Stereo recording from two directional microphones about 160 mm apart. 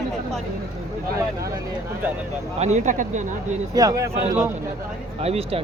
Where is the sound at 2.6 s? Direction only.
45° right (ahead or behind).